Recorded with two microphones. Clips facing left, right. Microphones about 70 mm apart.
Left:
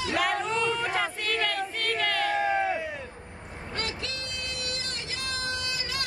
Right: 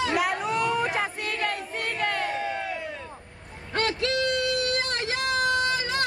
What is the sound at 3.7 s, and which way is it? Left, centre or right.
Vehicle, right.